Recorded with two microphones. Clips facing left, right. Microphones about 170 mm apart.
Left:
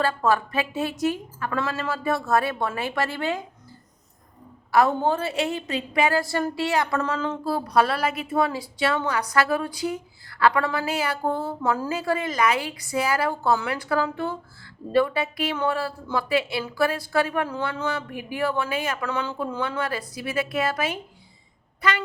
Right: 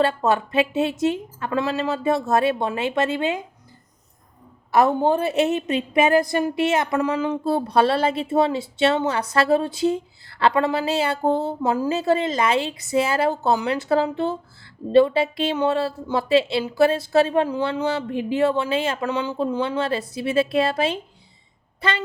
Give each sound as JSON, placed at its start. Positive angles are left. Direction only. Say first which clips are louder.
{"t": 0.0, "sound": "speech", "louder": "right 3 dB", "side_deg": -20}
{"t": 4.7, "sound": "speech", "louder": "right 3 dB", "side_deg": -20}
{"t": 7.5, "sound": "speech", "louder": "right 3 dB", "side_deg": -25}